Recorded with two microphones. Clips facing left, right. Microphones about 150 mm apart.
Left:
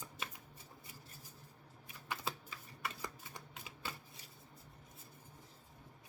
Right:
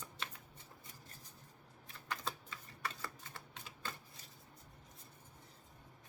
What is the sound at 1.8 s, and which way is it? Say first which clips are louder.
Typewriter: left 1 dB; 10° left (ahead or behind).